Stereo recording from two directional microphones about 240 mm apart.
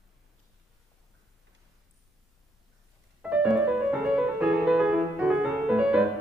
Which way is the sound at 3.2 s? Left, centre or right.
Centre.